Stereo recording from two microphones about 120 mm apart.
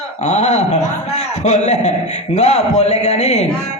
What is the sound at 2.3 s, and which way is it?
A man's voice, 65° left (ahead or behind).